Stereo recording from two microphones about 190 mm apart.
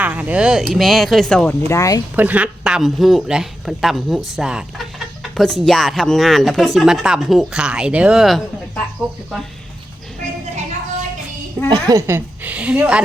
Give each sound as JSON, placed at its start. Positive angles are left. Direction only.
{"t": 0.0, "sound": "speech", "side_deg": -5}
{"t": 1.6, "sound": "speech", "side_deg": 15}
{"t": 2.1, "sound": "speech", "side_deg": -10}
{"t": 11.7, "sound": "a woman's voice", "side_deg": -20}